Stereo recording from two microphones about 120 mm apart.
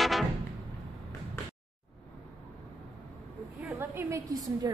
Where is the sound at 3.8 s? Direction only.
20° right (ahead or behind).